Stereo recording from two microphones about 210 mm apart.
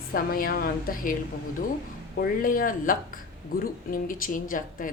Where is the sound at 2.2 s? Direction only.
40° left (ahead or behind).